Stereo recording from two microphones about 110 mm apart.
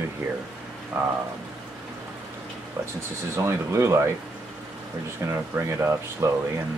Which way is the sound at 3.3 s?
25° right (ahead or behind).